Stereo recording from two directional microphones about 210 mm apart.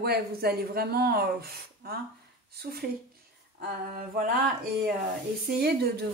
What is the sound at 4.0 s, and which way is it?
Speech, 40° right (ahead or behind).